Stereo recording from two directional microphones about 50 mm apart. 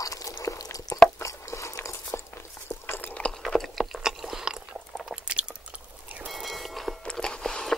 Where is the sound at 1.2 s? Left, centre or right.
Left.